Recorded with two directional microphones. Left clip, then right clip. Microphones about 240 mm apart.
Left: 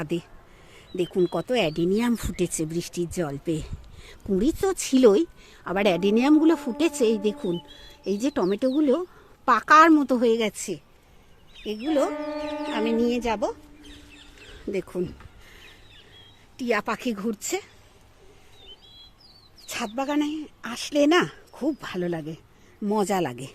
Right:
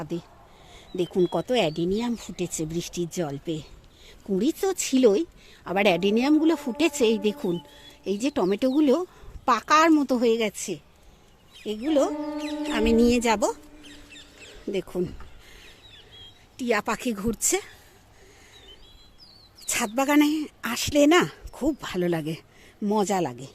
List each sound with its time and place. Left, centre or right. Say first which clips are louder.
0.9 s a woman's voice: even; centre
3.5 s a sound: left 3 dB; centre
4.4 s a woman's voice: left 1 dB; centre
11.9 s a woman's voice: right 1 dB; centre
12.9 s speech: right 5 dB; centre
14.6 s speech: even; centre
16.6 s a woman's voice: even; centre
19.6 s speech: right 4 dB; centre
22.0 s speech: right 4 dB; centre
22.8 s a woman's voice: even; centre